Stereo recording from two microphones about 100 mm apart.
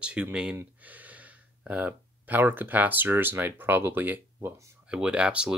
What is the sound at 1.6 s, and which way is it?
Speech, 15° right (ahead or behind).